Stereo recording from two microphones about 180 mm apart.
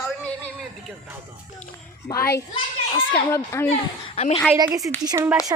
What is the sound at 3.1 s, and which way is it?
Speech, 15° left (ahead or behind).